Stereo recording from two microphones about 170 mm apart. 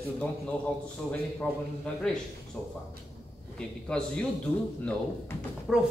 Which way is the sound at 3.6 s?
5° left (ahead or behind).